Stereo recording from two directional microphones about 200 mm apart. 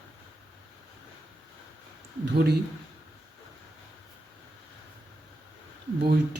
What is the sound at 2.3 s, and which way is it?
Speech, 55° right (ahead or behind).